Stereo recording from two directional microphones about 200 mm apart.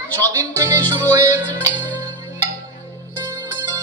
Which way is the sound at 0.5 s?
15° right (ahead or behind).